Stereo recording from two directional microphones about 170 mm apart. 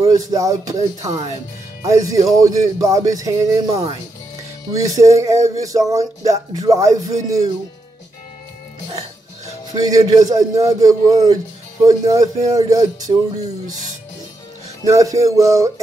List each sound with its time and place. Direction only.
0.0 s music: 20° right (ahead or behind)
9.8 s music: 20° right (ahead or behind)
14.9 s music: 20° right (ahead or behind)